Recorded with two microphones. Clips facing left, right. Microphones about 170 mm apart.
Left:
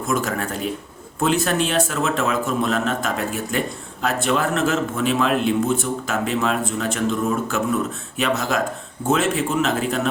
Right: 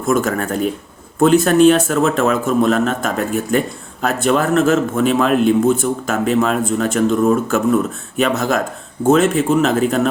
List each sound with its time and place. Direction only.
0.1 s a man's voice: 50° right (ahead or behind)